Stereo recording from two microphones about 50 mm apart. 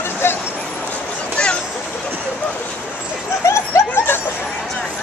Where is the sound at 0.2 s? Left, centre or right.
Left.